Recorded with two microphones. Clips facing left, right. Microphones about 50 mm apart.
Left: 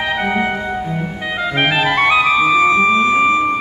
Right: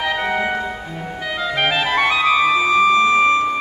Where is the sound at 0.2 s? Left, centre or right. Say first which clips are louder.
Left 3 dB; left.